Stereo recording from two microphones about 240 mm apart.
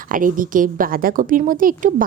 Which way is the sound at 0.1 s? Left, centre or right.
Right.